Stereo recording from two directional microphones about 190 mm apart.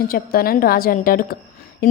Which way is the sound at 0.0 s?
50° left (ahead or behind).